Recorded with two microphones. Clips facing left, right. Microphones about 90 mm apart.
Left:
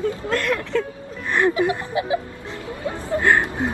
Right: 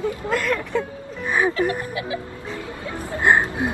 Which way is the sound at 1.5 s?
20° left (ahead or behind).